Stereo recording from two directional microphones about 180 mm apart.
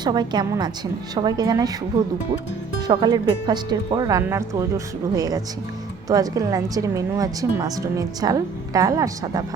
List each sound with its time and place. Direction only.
0.0 s a woman's voice: 25° right (ahead or behind)
2.8 s a woman's voice: 25° right (ahead or behind)